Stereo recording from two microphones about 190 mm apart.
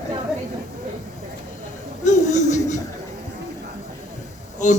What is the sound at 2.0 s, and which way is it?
Chuckle, 40° left (ahead or behind).